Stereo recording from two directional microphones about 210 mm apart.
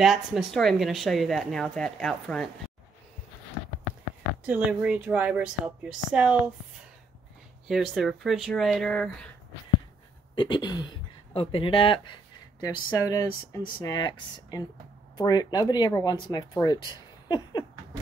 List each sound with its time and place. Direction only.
0.0 s speech: centre (ahead or behind)
4.5 s speech: 5° right (ahead or behind)
7.6 s speech: centre (ahead or behind)
10.3 s speech: 20° left (ahead or behind)